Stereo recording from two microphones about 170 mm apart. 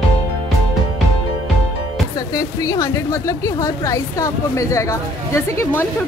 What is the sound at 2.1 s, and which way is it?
Speech, 20° left (ahead or behind).